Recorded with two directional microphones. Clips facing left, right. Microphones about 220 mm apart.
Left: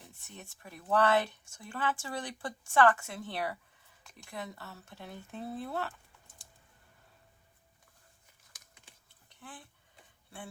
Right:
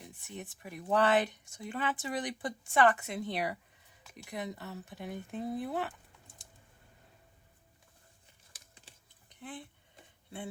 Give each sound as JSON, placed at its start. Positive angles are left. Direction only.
{"t": 0.0, "sound": "speech", "side_deg": -15}
{"t": 8.5, "sound": "typing", "side_deg": -30}
{"t": 9.3, "sound": "a sound", "side_deg": -20}